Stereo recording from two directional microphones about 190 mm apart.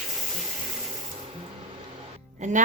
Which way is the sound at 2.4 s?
40° right (ahead or behind).